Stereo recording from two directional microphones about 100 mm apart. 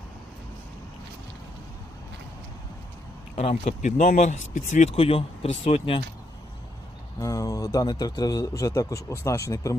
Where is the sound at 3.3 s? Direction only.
90° left.